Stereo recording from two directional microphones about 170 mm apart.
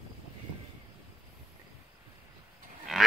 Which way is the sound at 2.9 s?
Centre (ahead or behind).